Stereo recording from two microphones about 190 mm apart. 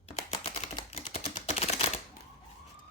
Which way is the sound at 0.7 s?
25° left (ahead or behind).